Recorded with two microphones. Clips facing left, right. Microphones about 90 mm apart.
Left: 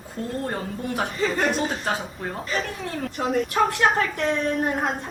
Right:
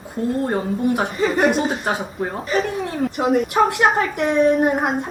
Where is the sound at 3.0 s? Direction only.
5° right (ahead or behind).